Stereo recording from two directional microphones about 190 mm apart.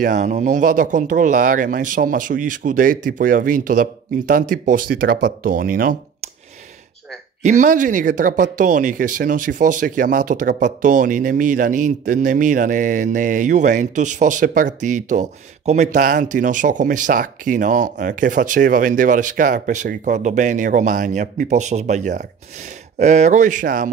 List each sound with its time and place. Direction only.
0.0 s speech: 40° right (ahead or behind)
7.4 s speech: 40° right (ahead or behind)